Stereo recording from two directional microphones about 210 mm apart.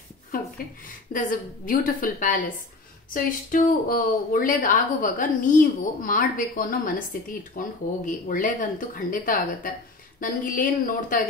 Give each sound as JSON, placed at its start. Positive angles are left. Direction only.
{"t": 1.1, "sound": "speech", "side_deg": 40}